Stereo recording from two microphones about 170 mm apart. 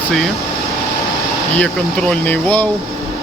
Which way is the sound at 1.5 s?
5° left (ahead or behind).